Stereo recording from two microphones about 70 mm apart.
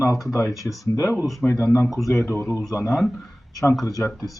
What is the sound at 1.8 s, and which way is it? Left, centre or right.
Speech, centre.